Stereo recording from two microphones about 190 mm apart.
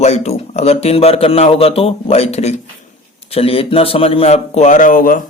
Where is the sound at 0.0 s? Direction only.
35° left (ahead or behind).